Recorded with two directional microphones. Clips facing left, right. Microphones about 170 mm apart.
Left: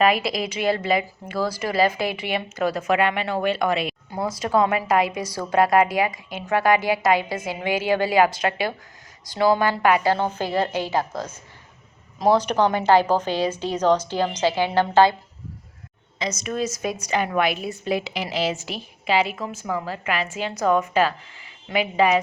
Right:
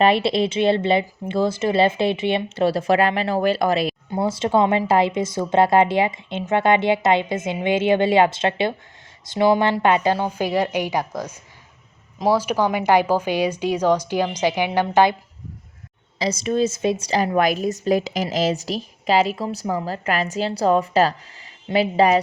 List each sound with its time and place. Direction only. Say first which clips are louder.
0.0 s a woman's voice: right 3 dB; 30° right (ahead or behind)
16.1 s a woman's voice: right 6 dB; 30° right (ahead or behind)